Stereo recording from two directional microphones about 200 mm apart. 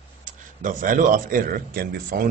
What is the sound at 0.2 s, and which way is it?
Speech, 40° right (ahead or behind).